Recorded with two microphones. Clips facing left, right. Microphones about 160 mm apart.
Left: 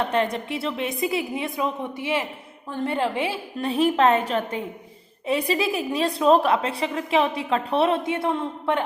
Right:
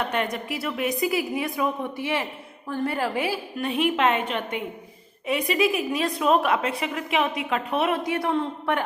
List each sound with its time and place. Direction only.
0.0 s a woman's voice: 30° left (ahead or behind)